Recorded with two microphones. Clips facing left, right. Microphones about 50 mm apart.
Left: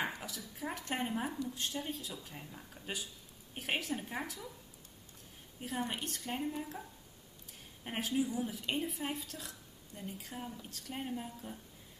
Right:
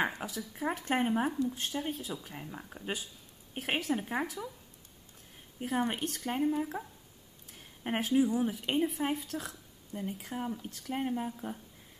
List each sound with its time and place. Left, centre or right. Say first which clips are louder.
0.2 s a woman's voice: right 7 dB; right
5.6 s a woman's voice: right 6 dB; right
7.8 s speech: right 6 dB; right
8.1 s speech: right 7 dB; centre
8.4 s a woman's voice: right 7 dB; right
9.5 s a sound: right 7 dB; right
10.2 s speech: right 8 dB; right